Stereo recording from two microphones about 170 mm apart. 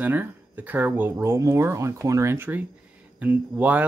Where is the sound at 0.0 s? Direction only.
10° right (ahead or behind).